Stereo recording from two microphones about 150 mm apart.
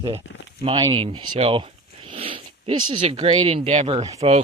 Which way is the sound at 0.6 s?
30° right (ahead or behind).